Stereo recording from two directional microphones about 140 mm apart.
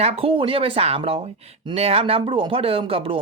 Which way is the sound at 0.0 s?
45° right (ahead or behind).